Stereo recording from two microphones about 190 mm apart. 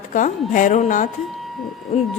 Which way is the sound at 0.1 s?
45° left (ahead or behind).